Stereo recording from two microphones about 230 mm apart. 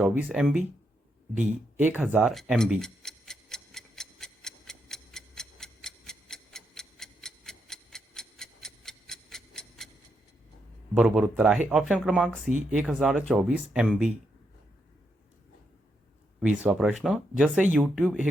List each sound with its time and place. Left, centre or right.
0.0 s speech: centre
1.4 s tick-tock: centre
10.9 s speech: centre
16.6 s speech: centre